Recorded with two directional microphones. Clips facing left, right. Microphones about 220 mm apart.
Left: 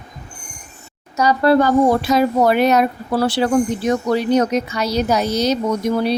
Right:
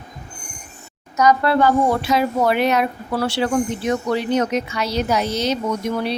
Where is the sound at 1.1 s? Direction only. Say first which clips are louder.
Left 2 dB; 30° left (ahead or behind).